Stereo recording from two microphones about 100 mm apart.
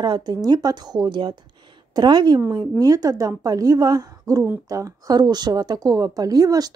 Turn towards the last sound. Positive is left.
turn(degrees=-40)  # may be behind; listen again after turning